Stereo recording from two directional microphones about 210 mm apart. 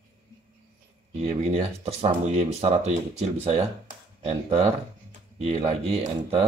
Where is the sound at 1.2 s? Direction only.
30° right (ahead or behind).